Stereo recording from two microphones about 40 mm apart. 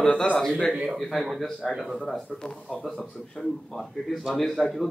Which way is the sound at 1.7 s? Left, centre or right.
Centre.